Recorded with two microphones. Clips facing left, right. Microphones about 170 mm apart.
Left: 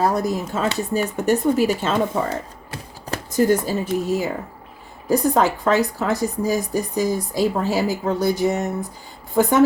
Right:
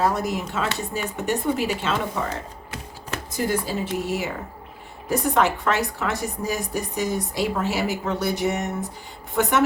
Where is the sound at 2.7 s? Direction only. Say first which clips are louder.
Left 3 dB; 40° left (ahead or behind).